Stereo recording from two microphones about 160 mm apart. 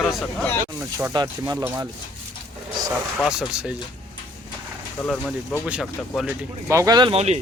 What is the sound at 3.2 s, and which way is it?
Speech, 5° right (ahead or behind).